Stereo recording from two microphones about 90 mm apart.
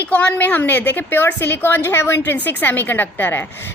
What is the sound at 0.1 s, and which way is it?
A woman's voice, 15° left (ahead or behind).